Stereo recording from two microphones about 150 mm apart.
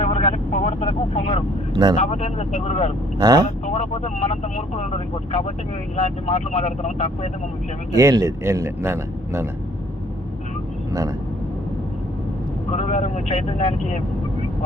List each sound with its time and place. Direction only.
0.0 s vehicle: 45° left (ahead or behind)
1.7 s speech: 30° right (ahead or behind)
2.0 s speech: 45° left (ahead or behind)
3.2 s speech: 25° right (ahead or behind)
3.7 s speech: 45° left (ahead or behind)
7.9 s a man's voice: 20° right (ahead or behind)
12.7 s speech: 45° left (ahead or behind)